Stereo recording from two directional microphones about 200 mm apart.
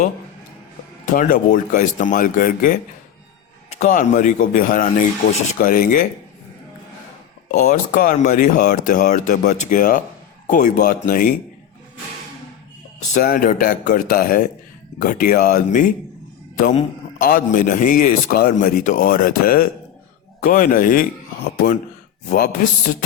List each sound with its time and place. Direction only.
1.0 s speech: 40° left (ahead or behind)
3.8 s a man's voice: 40° left (ahead or behind)
7.4 s speech: 40° left (ahead or behind)
13.1 s a man's voice: 45° left (ahead or behind)
22.3 s speech: 40° left (ahead or behind)